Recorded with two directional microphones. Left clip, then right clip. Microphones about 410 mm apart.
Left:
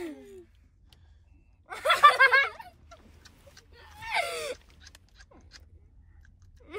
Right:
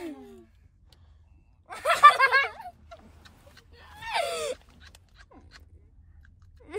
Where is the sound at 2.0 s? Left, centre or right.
Left.